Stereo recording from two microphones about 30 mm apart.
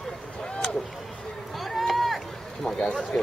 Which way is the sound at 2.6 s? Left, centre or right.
Left.